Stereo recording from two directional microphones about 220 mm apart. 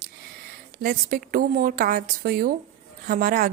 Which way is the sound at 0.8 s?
40° right (ahead or behind).